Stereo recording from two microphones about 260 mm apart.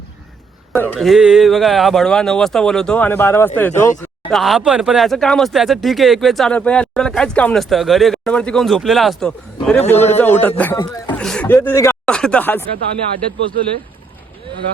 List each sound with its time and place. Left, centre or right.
0.7 s speech: centre
9.8 s a man's voice: left
10.2 s speech: centre